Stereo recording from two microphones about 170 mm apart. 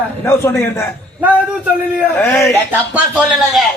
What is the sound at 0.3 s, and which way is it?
Speech, 15° left (ahead or behind).